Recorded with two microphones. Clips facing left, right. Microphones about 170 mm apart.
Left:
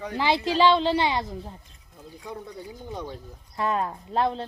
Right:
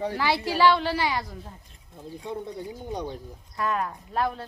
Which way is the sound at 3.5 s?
25° left (ahead or behind).